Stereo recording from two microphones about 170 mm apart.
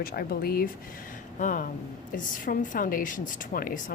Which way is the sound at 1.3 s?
50° left (ahead or behind).